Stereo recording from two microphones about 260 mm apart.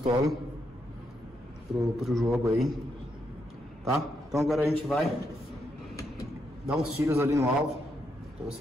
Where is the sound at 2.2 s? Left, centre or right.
Centre.